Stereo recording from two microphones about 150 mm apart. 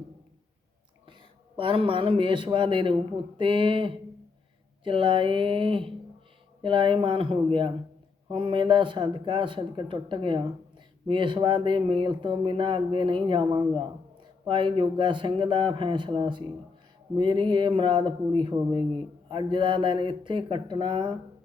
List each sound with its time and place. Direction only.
1.5 s speech: 35° right (ahead or behind)